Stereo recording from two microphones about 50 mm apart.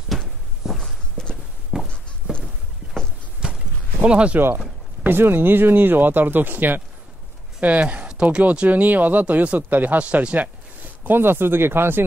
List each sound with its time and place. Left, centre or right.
0.6 s walk: centre
1.2 s walk: centre
1.7 s a sound: centre
4.0 s speech: right
5.0 s speech: right
7.6 s speech: right
11.1 s speech: right